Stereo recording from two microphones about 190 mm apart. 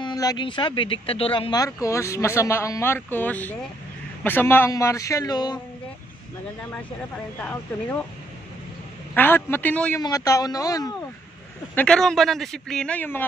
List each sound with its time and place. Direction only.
0.0 s a man's voice: 20° left (ahead or behind)
7.3 s a man's voice: 10° left (ahead or behind)
9.1 s a man's voice: 10° left (ahead or behind)
11.7 s speech: 5° left (ahead or behind)